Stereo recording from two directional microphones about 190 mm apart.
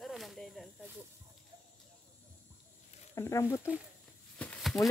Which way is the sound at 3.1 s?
15° left (ahead or behind).